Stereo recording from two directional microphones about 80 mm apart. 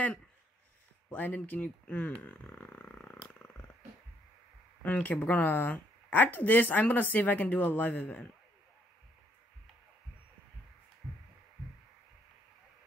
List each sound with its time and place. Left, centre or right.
1.1 s speech: left
4.8 s speech: centre